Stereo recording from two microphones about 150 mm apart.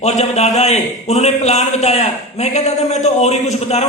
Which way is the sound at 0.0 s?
50° left (ahead or behind).